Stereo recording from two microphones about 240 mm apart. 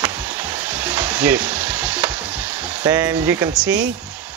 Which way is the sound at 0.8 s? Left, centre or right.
Centre.